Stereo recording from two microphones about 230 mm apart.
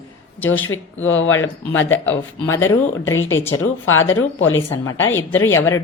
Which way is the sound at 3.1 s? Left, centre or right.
Left.